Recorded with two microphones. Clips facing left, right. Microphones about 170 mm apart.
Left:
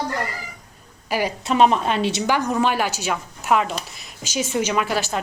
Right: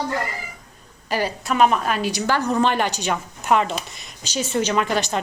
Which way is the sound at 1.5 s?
30° left (ahead or behind).